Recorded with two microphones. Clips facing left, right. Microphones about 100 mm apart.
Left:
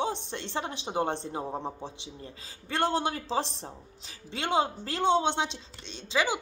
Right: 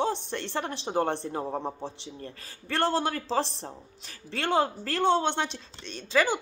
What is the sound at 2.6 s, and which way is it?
Speech, 15° left (ahead or behind).